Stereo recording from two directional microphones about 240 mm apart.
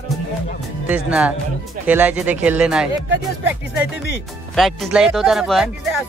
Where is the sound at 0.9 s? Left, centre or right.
Centre.